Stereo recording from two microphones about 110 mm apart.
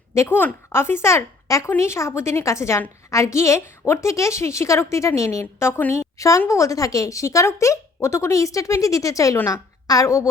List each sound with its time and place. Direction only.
0.1 s a woman's voice: 20° left (ahead or behind)